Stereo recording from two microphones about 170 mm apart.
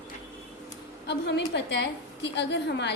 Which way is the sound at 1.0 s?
90° left.